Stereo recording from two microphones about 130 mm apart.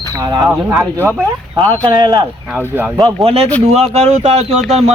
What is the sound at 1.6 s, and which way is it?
Speech, 35° right (ahead or behind).